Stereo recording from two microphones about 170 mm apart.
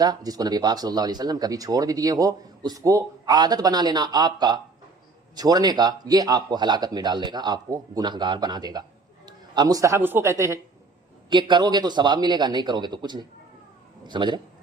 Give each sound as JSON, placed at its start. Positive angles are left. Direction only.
{"t": 0.0, "sound": "a man's voice", "side_deg": -20}
{"t": 11.3, "sound": "speech", "side_deg": -25}